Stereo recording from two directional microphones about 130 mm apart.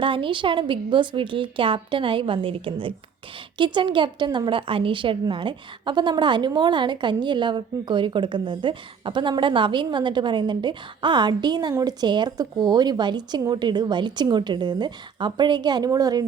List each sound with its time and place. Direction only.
0.0 s a woman's voice: 40° right (ahead or behind)